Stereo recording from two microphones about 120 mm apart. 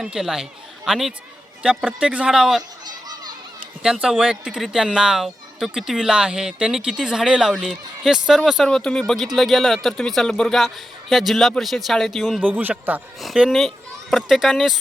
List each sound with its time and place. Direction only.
0.0 s speech: 5° right (ahead or behind)
2.8 s a sound: 35° right (ahead or behind)
3.8 s speech: 5° right (ahead or behind)
12.4 s speech: 15° right (ahead or behind)
13.2 s speech: 5° right (ahead or behind)